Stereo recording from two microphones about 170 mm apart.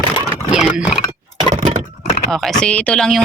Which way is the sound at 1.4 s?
35° right (ahead or behind).